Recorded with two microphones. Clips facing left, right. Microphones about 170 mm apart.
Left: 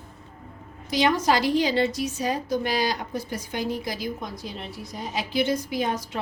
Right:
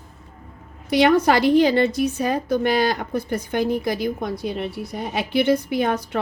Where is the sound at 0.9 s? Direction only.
60° right (ahead or behind).